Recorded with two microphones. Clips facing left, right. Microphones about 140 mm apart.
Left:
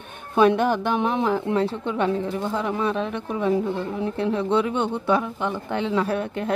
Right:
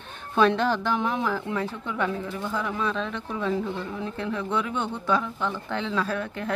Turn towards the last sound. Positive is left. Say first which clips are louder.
# left 4 dB
turn(degrees=25)  # may be behind; listen again after turning